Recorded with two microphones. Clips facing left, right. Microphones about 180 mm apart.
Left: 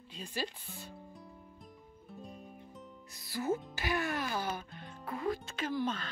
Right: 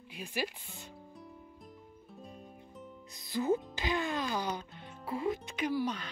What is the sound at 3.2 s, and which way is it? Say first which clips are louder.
Music: right 4 dB; 20° right (ahead or behind).